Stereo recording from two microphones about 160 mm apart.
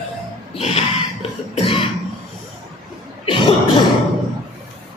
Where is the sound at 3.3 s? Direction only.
30° left (ahead or behind).